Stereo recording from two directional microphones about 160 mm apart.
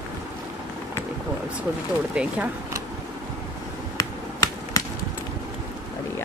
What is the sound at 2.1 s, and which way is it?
Speech, 5° right (ahead or behind).